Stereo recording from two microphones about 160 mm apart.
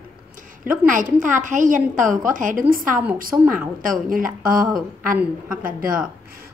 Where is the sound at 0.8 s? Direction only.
55° right (ahead or behind).